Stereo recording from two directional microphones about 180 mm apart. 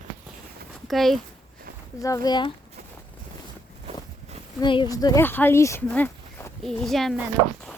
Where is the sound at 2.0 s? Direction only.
20° left (ahead or behind).